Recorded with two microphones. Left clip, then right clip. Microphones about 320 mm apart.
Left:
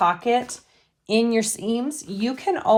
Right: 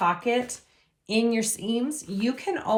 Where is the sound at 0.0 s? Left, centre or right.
Left.